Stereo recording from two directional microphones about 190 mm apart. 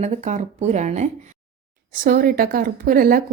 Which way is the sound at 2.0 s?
50° right (ahead or behind).